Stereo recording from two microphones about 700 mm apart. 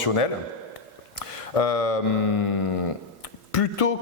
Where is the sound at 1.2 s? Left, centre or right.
Left.